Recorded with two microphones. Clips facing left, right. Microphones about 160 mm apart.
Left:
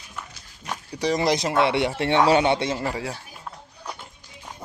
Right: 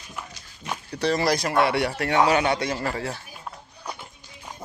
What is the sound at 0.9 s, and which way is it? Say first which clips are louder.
Speech: left 1 dB; 15° left (ahead or behind).